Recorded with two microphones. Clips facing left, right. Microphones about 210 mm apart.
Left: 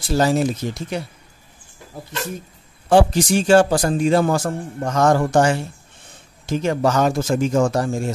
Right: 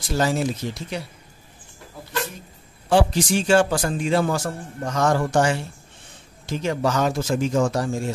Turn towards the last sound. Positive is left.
turn(degrees=50)  # may be behind; listen again after turning